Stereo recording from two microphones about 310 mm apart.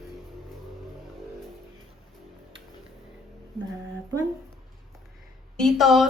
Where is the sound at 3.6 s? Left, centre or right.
Centre.